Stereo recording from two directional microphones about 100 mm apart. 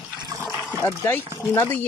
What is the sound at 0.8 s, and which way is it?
Speech, 25° left (ahead or behind).